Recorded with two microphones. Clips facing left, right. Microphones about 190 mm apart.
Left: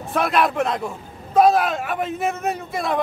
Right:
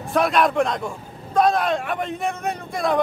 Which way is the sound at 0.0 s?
Centre (ahead or behind).